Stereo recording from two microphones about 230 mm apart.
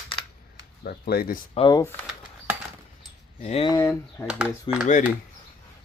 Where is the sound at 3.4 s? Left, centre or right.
Left.